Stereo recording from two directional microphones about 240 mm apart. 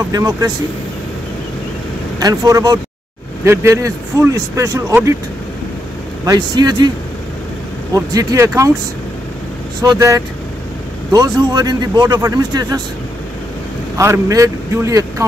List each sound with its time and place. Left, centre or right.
0.1 s speech: centre
2.1 s speech: centre
6.2 s speech: centre
7.9 s speech: centre
9.8 s speech: centre
13.9 s speech: centre